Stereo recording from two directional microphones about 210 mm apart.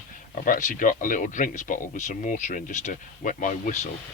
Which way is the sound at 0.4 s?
40° left (ahead or behind).